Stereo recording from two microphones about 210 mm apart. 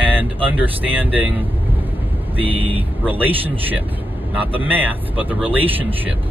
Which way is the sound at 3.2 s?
10° right (ahead or behind).